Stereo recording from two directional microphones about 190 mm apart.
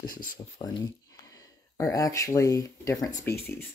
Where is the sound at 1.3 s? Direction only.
15° left (ahead or behind).